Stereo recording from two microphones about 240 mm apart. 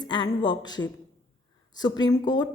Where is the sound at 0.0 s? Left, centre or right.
Centre.